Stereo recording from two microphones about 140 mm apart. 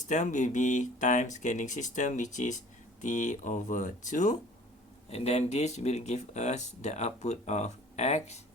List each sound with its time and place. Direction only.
0.1 s speech: 60° left (ahead or behind)
5.1 s speech: 50° left (ahead or behind)